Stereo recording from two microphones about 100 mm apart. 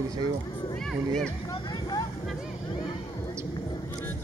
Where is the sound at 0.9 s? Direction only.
5° left (ahead or behind).